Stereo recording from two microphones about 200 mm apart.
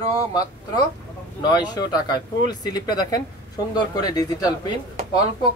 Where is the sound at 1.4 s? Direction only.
20° left (ahead or behind).